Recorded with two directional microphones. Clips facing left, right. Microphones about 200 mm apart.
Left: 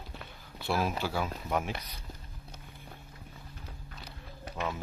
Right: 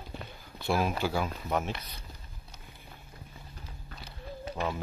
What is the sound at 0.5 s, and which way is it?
Speech, centre (ahead or behind).